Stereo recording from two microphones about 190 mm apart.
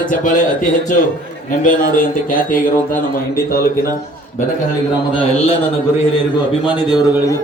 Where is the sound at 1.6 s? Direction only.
45° left (ahead or behind).